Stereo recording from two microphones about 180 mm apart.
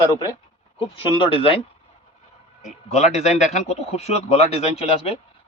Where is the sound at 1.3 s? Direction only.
30° left (ahead or behind).